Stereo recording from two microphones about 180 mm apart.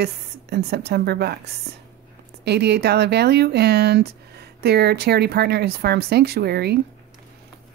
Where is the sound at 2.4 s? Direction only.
65° right (ahead or behind).